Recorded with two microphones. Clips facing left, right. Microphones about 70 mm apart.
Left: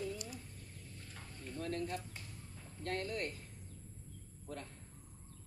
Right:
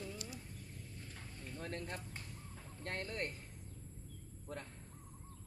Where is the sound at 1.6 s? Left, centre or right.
Right.